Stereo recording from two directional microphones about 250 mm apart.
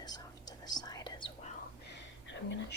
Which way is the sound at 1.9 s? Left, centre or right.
Left.